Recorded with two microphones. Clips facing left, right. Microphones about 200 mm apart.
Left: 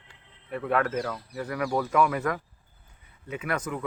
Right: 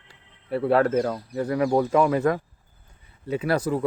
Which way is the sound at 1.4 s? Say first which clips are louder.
Right 7 dB; 30° right (ahead or behind).